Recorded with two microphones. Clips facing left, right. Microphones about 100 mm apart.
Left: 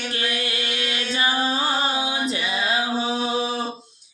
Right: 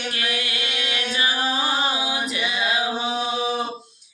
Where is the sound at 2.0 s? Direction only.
25° left (ahead or behind).